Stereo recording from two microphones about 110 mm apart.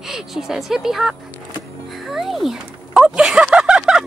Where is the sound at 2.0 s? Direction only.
Centre (ahead or behind).